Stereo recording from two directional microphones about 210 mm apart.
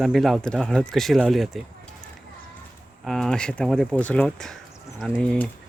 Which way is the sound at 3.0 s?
Centre (ahead or behind).